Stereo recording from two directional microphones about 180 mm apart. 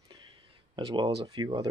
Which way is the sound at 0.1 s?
25° right (ahead or behind).